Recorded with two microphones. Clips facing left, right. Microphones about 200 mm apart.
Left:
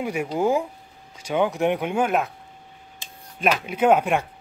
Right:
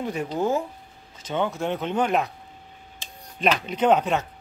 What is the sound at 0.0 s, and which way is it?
Speech, 10° left (ahead or behind).